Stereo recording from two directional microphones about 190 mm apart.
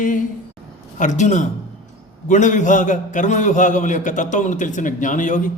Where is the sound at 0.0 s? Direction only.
45° left (ahead or behind).